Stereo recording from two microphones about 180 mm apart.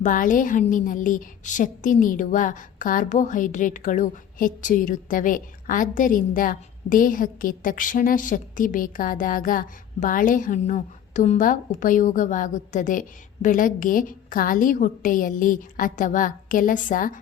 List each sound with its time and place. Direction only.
0.0 s a woman's voice: 45° left (ahead or behind)